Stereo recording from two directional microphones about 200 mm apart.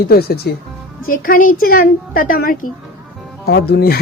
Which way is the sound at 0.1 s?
50° left (ahead or behind).